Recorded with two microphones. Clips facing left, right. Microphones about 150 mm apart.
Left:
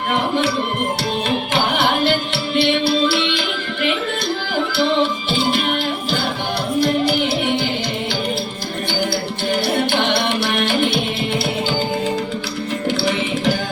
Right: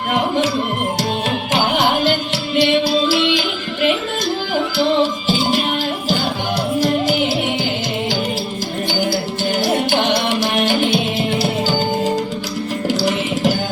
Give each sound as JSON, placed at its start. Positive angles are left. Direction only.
{"t": 0.1, "sound": "music", "side_deg": -40}
{"t": 2.6, "sound": "music", "side_deg": -40}
{"t": 6.7, "sound": "music", "side_deg": -40}
{"t": 9.6, "sound": "music", "side_deg": -40}
{"t": 12.9, "sound": "music", "side_deg": -40}